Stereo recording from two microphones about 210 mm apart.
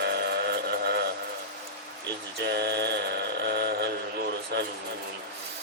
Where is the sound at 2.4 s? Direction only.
55° right (ahead or behind).